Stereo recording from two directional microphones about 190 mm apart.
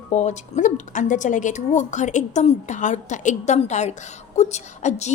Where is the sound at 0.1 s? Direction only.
40° left (ahead or behind).